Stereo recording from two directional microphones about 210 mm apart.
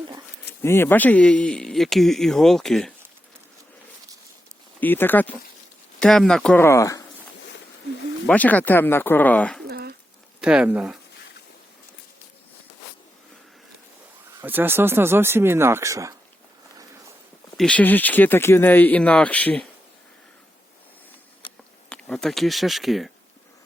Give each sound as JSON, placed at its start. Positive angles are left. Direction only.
{"t": 0.6, "sound": "speech", "side_deg": 10}
{"t": 4.8, "sound": "speech", "side_deg": 10}
{"t": 8.3, "sound": "speech", "side_deg": 5}
{"t": 9.6, "sound": "a sound", "side_deg": -50}
{"t": 10.4, "sound": "speech", "side_deg": -5}
{"t": 14.4, "sound": "speech", "side_deg": -10}
{"t": 17.6, "sound": "speech", "side_deg": 5}
{"t": 21.8, "sound": "speech", "side_deg": 5}